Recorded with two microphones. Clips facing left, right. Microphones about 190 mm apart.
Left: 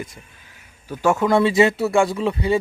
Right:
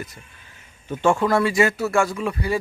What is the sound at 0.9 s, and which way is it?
Speech, 5° left (ahead or behind).